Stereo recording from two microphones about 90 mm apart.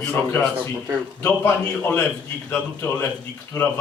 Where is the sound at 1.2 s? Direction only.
25° left (ahead or behind).